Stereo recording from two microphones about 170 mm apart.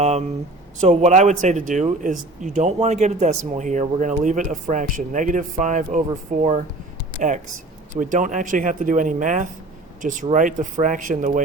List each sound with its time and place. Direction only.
0.0 s speech: 40° right (ahead or behind)
7.9 s speech: 50° right (ahead or behind)